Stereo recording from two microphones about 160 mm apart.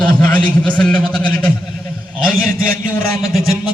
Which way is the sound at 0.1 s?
10° left (ahead or behind).